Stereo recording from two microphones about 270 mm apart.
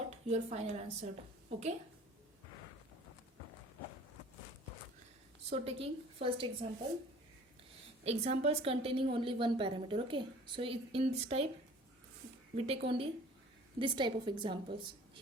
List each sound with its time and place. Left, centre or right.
0.1 s a woman's voice: right
5.5 s a woman's voice: right
8.0 s a woman's voice: right
12.5 s a woman's voice: right